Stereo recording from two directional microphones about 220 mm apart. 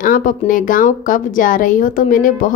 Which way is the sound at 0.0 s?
40° left (ahead or behind).